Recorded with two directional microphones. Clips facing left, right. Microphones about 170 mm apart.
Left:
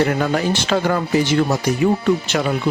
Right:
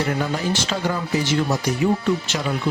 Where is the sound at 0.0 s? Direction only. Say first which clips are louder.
Left 5 dB; 65° left (ahead or behind).